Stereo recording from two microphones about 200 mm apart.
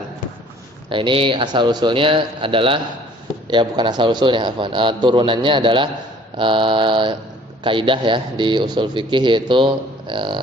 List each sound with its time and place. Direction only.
0.9 s speech: 25° right (ahead or behind)